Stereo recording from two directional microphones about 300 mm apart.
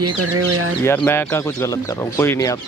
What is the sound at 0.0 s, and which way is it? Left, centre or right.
Speech, right.